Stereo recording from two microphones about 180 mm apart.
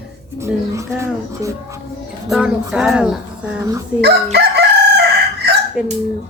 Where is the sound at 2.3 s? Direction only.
5° right (ahead or behind).